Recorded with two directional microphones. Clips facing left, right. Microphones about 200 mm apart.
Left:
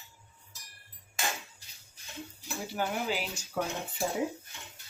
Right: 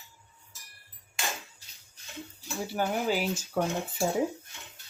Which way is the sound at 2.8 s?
45° right (ahead or behind).